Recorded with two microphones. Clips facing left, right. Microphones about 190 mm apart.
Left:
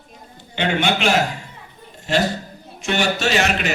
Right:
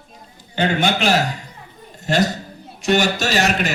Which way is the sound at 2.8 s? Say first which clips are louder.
Right 2 dB; 40° right (ahead or behind).